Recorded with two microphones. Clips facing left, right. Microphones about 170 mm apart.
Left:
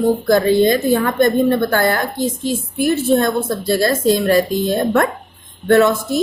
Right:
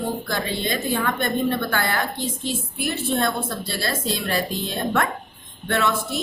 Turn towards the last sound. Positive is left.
turn(degrees=40)  # may be behind; listen again after turning